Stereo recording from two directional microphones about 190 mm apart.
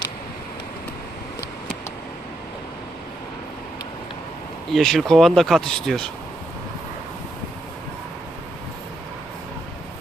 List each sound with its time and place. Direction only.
4.7 s speech: centre (ahead or behind)